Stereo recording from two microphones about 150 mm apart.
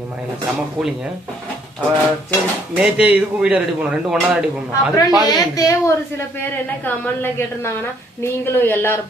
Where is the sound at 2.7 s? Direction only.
10° right (ahead or behind).